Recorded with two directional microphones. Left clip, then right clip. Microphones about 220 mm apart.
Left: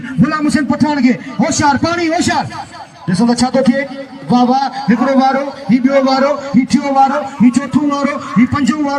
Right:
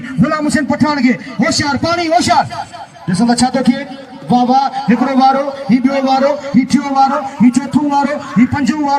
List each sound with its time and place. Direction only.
0.2 s a man's voice: 10° right (ahead or behind); by 9.0 s 10° left (ahead or behind)